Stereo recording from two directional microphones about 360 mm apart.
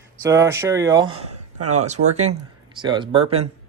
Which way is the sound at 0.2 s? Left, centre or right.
Centre.